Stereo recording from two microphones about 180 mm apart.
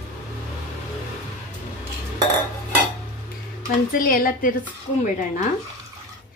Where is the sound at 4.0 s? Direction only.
50° left (ahead or behind).